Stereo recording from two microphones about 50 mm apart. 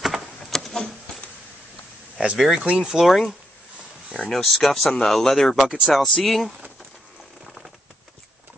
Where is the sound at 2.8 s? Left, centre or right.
Centre.